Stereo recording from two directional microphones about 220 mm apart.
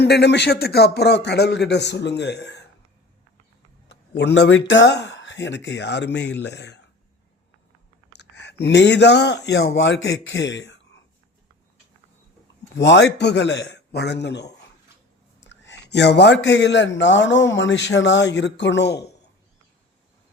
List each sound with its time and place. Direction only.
0.0 s a man's voice: 50° left (ahead or behind)
3.8 s a man's voice: 50° left (ahead or behind)
8.2 s a sound: 50° left (ahead or behind)
8.6 s a man's voice: 50° left (ahead or behind)
12.7 s a man's voice: 55° left (ahead or behind)